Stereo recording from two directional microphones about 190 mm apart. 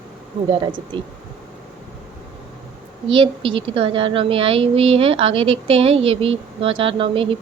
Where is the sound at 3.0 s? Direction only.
25° right (ahead or behind).